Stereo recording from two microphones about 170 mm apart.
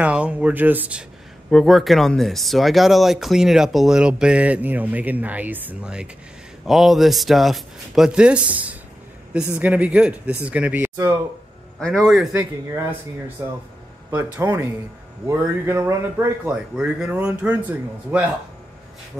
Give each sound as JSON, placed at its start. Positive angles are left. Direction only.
{"t": 0.0, "sound": "speech", "side_deg": -5}
{"t": 11.8, "sound": "speech", "side_deg": 0}
{"t": 13.4, "sound": "speech", "side_deg": -15}